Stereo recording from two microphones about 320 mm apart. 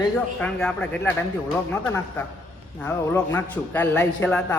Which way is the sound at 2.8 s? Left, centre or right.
Centre.